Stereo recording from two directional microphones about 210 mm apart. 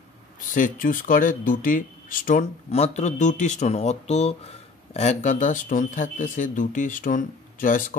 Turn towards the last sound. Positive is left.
turn(degrees=40)  # may be behind; listen again after turning